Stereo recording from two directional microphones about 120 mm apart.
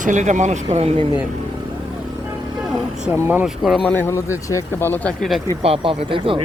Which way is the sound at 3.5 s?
Centre (ahead or behind).